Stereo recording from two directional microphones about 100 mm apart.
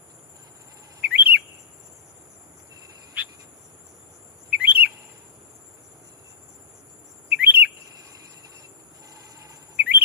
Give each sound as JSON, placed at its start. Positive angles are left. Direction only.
{"t": 1.0, "sound": "chirp", "side_deg": -15}
{"t": 3.2, "sound": "cricket", "side_deg": -15}
{"t": 4.5, "sound": "chirp", "side_deg": -15}
{"t": 7.3, "sound": "chirp", "side_deg": -15}
{"t": 7.9, "sound": "cricket", "side_deg": -40}
{"t": 9.7, "sound": "chirp", "side_deg": -15}